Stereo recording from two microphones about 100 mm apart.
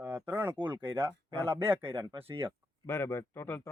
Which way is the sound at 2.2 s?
65° right (ahead or behind).